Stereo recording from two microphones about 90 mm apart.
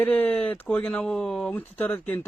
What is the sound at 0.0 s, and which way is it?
Speech, 20° left (ahead or behind).